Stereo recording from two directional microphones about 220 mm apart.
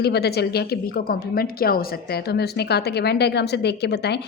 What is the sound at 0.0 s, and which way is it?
A woman's voice, 45° left (ahead or behind).